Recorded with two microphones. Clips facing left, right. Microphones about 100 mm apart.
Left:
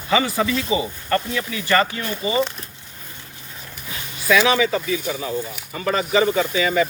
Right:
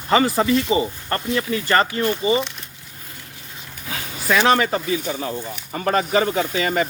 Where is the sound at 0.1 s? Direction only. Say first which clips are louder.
Right 3 dB; 40° right (ahead or behind).